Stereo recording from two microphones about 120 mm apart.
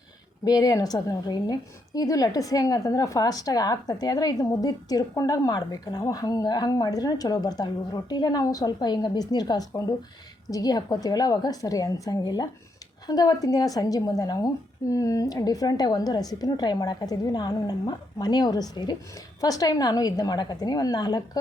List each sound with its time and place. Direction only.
0.4 s a woman's voice: 30° left (ahead or behind)